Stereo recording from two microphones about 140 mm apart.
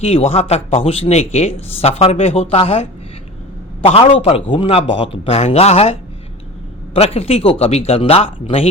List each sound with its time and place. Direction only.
0.0 s speech: 45° left (ahead or behind)
3.8 s speech: 45° left (ahead or behind)